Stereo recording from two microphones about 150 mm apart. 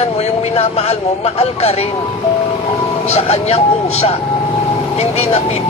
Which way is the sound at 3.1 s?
45° left (ahead or behind).